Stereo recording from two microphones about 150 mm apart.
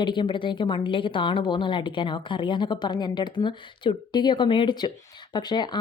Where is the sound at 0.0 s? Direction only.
30° left (ahead or behind).